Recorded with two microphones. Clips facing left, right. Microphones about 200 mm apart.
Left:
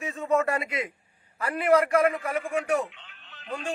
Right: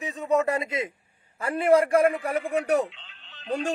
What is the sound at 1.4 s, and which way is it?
A man's voice, 25° right (ahead or behind).